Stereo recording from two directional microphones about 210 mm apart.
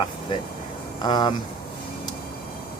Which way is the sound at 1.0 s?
20° left (ahead or behind).